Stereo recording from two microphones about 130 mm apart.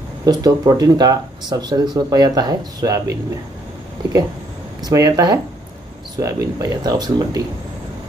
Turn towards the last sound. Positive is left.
turn(degrees=-30)  # may be behind; listen again after turning